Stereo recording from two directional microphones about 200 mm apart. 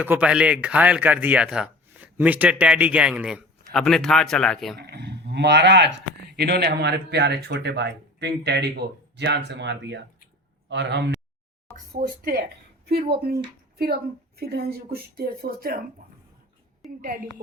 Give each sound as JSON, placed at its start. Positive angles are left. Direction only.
{"t": 0.0, "sound": "speech", "side_deg": -5}
{"t": 4.8, "sound": "speech", "side_deg": -55}
{"t": 11.9, "sound": "a woman's voice", "side_deg": -45}
{"t": 17.0, "sound": "speech", "side_deg": -45}